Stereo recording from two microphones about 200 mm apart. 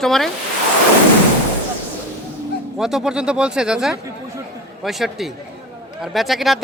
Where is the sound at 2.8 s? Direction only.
Centre (ahead or behind).